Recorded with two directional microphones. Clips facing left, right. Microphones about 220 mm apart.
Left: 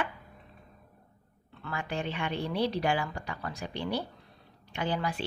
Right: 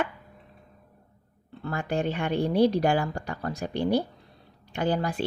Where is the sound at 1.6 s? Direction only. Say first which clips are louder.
Right 7 dB; 45° right (ahead or behind).